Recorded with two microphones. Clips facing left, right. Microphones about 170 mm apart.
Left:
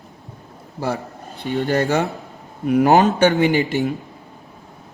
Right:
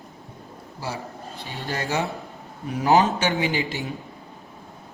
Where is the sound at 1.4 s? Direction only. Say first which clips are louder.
Left 12 dB; 65° left (ahead or behind).